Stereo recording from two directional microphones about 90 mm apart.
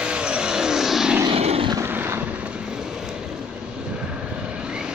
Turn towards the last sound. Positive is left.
turn(degrees=-10)  # may be behind; listen again after turning